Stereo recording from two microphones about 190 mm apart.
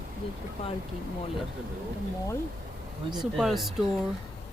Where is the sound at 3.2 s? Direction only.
Centre (ahead or behind).